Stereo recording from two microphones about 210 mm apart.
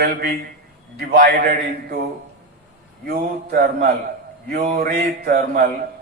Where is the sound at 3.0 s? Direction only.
45° right (ahead or behind).